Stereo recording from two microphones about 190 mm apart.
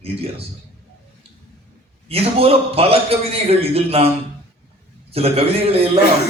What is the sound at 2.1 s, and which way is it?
A man's voice, 30° right (ahead or behind).